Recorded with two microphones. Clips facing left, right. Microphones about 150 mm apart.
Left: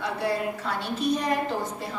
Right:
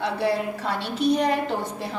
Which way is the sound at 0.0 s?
75° right (ahead or behind).